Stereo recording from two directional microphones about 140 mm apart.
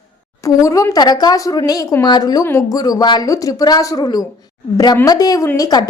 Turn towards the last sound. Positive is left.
turn(degrees=25)  # may be behind; listen again after turning